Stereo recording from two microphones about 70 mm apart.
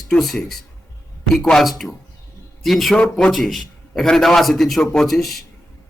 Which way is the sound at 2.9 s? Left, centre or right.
Centre.